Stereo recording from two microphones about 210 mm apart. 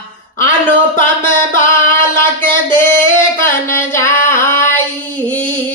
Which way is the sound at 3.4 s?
10° left (ahead or behind).